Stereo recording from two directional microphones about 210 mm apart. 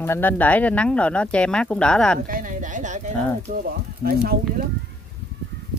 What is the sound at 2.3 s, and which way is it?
Speech, 40° right (ahead or behind).